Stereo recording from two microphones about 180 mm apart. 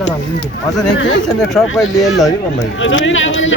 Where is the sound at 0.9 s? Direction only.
90° left.